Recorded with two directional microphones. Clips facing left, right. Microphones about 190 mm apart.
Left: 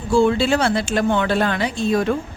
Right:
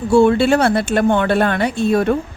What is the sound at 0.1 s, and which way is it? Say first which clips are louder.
Speech: right 4 dB; 60° right (ahead or behind).